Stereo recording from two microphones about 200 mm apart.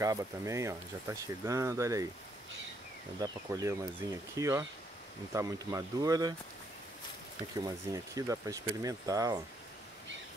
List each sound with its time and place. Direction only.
0.0 s speech: 15° right (ahead or behind)
3.2 s speech: 15° right (ahead or behind)
7.5 s speech: 15° right (ahead or behind)